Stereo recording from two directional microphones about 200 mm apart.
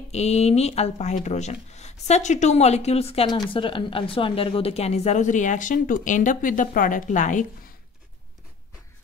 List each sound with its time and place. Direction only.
0.1 s speech: 35° left (ahead or behind)